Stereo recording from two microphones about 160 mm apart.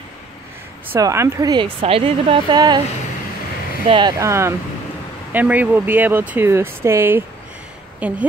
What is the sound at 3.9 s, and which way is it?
A woman's voice, 25° right (ahead or behind).